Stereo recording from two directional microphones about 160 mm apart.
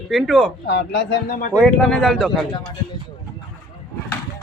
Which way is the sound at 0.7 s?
90° left.